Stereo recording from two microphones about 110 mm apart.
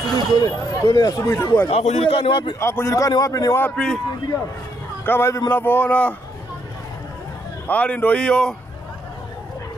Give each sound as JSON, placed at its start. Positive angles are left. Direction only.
{"t": 0.1, "sound": "speech", "side_deg": 35}
{"t": 1.2, "sound": "a man's voice", "side_deg": 25}
{"t": 1.7, "sound": "a man's voice", "side_deg": 70}
{"t": 2.6, "sound": "speech", "side_deg": 25}
{"t": 3.6, "sound": "speech", "side_deg": 5}
{"t": 5.0, "sound": "a man's voice", "side_deg": 20}
{"t": 7.6, "sound": "speech", "side_deg": 15}